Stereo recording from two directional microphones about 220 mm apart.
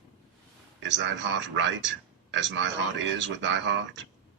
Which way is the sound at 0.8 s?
55° right (ahead or behind).